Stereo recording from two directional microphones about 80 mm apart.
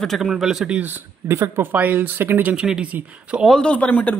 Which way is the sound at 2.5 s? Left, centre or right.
Centre.